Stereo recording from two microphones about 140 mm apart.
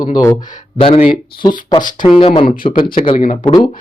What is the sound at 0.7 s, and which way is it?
Speech, 45° left (ahead or behind).